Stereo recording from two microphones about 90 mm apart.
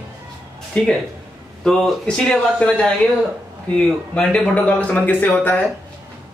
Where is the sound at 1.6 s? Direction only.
5° left (ahead or behind).